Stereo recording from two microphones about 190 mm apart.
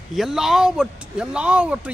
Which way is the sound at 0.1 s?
Centre (ahead or behind).